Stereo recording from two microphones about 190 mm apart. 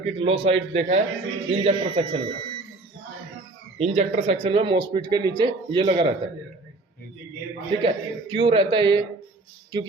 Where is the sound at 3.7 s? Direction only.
35° right (ahead or behind).